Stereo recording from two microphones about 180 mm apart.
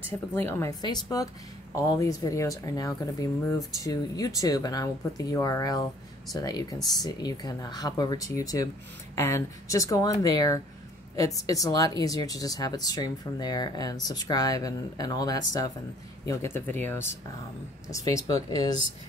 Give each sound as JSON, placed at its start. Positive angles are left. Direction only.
{"t": 0.3, "sound": "speech", "side_deg": 10}